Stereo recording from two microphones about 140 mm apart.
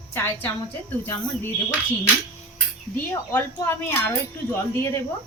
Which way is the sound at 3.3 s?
15° left (ahead or behind).